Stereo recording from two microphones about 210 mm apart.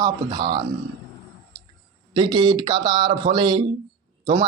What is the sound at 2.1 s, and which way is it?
Speech, 20° right (ahead or behind).